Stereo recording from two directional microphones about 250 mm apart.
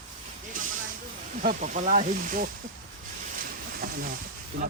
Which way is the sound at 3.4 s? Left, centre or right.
Right.